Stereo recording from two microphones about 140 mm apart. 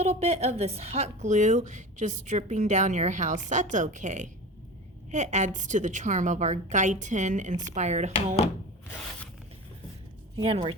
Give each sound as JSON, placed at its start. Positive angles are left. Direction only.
{"t": 0.0, "sound": "a woman's voice", "side_deg": -50}
{"t": 10.3, "sound": "a woman's voice", "side_deg": -45}